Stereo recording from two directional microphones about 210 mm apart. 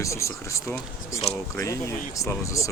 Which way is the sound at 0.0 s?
15° left (ahead or behind).